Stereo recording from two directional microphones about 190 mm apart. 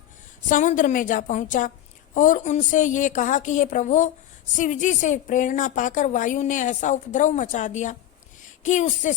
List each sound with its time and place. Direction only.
0.4 s a woman's voice: 40° left (ahead or behind)